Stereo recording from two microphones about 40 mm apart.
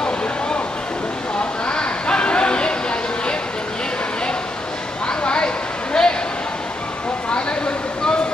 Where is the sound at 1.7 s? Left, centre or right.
Left.